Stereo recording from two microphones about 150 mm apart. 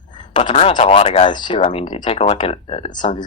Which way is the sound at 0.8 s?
45° left (ahead or behind).